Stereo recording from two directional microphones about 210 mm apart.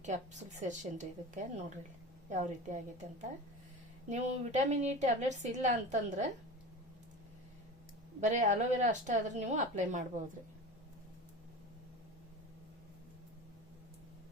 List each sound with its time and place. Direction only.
0.0 s a woman's voice: 35° right (ahead or behind)
8.2 s a woman's voice: 35° right (ahead or behind)